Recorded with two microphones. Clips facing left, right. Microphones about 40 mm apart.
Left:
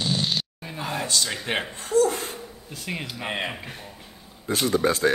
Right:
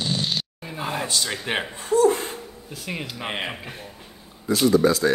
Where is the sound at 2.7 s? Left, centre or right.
Centre.